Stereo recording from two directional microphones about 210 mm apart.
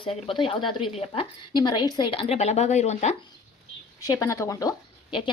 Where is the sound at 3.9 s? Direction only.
15° left (ahead or behind).